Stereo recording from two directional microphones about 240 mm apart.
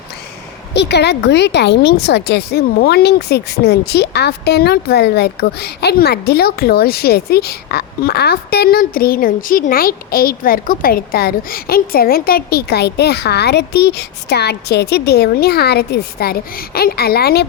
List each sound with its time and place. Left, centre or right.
0.7 s a woman's voice: left